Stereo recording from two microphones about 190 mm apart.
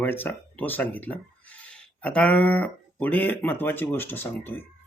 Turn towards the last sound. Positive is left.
turn(degrees=10)  # may be behind; listen again after turning